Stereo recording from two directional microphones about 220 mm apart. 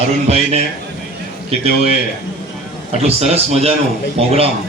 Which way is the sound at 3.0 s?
30° right (ahead or behind).